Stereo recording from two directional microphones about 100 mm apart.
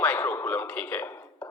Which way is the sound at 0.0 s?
15° left (ahead or behind).